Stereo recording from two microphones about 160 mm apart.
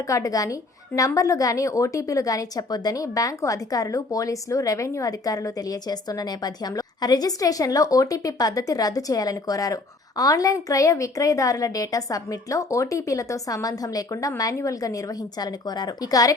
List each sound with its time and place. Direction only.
0.1 s a woman's voice: 20° left (ahead or behind)